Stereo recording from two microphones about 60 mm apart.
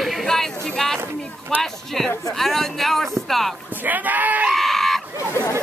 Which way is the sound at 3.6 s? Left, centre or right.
Right.